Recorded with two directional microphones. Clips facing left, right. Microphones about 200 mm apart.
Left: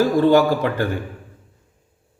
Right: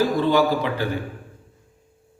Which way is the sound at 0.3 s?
50° left (ahead or behind).